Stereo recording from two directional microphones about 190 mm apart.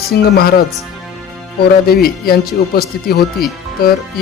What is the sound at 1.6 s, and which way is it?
Speech, 55° left (ahead or behind).